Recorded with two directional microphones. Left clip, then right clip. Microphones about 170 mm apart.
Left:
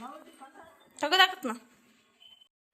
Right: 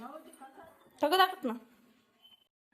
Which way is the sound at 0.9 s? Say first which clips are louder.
Left 3 dB; 35° right (ahead or behind).